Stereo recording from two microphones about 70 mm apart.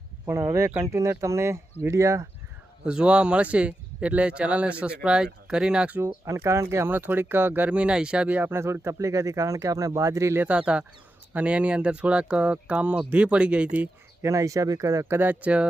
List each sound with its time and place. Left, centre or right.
0.3 s speech: right
2.8 s speech: centre
6.0 s speech: right
6.9 s speech: right
7.7 s speech: centre
8.4 s speech: right
10.4 s speech: centre
14.2 s speech: right
15.1 s speech: right